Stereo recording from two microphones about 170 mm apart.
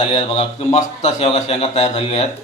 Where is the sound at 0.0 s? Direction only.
35° left (ahead or behind).